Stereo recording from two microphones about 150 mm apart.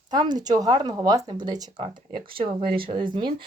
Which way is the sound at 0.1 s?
25° right (ahead or behind).